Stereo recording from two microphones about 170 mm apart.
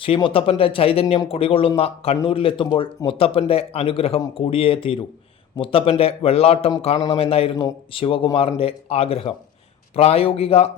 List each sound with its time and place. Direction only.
0.0 s a man's voice: 30° left (ahead or behind)